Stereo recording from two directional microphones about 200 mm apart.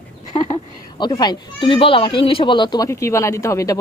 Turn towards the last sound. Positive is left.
turn(degrees=15)  # may be behind; listen again after turning